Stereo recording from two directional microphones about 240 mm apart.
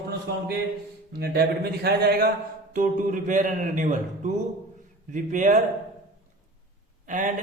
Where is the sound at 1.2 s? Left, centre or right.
Right.